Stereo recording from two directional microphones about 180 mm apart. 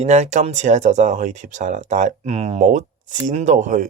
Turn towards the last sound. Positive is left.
turn(degrees=-45)  # may be behind; listen again after turning